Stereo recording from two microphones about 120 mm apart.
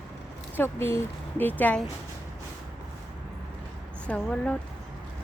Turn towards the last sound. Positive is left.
turn(degrees=10)  # may be behind; listen again after turning